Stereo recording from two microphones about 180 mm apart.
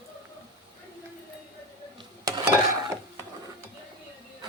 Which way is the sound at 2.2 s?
20° right (ahead or behind).